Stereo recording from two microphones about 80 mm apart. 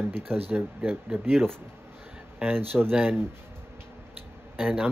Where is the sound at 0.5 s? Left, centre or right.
Right.